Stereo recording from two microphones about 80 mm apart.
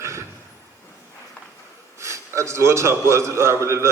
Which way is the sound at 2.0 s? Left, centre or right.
Right.